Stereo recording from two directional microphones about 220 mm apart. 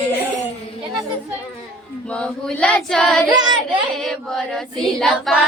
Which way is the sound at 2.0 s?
5° left (ahead or behind).